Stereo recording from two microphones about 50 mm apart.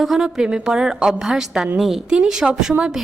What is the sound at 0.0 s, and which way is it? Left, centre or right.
A woman's voice, centre.